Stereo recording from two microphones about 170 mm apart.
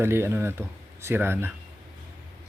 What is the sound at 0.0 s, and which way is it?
Speech, 15° right (ahead or behind).